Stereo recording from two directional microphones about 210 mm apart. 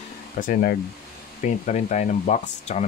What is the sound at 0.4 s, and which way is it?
Speech, 45° left (ahead or behind).